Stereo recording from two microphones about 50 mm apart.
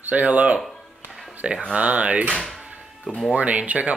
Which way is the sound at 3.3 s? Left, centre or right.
Right.